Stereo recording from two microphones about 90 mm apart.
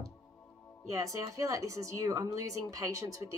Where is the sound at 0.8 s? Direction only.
35° right (ahead or behind).